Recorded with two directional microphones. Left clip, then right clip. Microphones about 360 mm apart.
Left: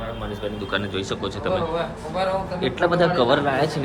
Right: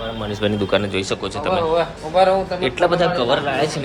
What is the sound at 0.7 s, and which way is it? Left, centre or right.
Speech, centre.